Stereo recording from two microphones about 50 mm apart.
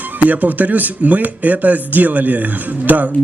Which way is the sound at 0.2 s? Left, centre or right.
Right.